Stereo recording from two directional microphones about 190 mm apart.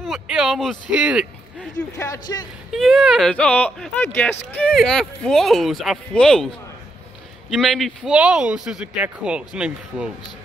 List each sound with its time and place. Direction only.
0.0 s a man's voice: centre (ahead or behind)
2.0 s speech: 20° left (ahead or behind)
2.7 s speech: centre (ahead or behind)